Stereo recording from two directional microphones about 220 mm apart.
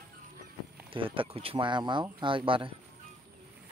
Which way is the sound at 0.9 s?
25° right (ahead or behind).